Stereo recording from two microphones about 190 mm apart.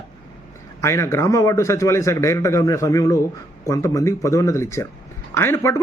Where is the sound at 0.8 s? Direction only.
15° left (ahead or behind).